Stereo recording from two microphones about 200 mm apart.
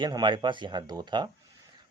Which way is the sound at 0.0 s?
20° right (ahead or behind).